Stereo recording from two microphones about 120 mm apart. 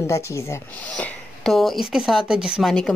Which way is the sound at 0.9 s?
5° left (ahead or behind).